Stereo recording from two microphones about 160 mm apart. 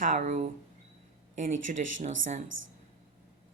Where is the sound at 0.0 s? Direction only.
55° right (ahead or behind).